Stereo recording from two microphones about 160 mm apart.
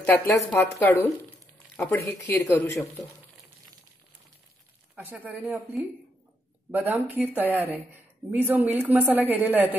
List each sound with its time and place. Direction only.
0.0 s speech: 15° left (ahead or behind)
4.9 s speech: 10° right (ahead or behind)